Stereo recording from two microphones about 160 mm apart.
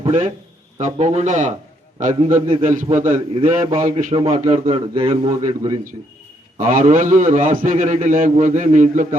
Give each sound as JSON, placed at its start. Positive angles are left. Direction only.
{"t": 0.0, "sound": "a man's voice", "side_deg": -45}
{"t": 4.1, "sound": "a man's voice", "side_deg": -35}
{"t": 6.6, "sound": "a man's voice", "side_deg": -50}